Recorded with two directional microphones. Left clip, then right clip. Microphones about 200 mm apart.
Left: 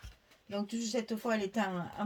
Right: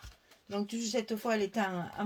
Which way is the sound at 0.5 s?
35° right (ahead or behind).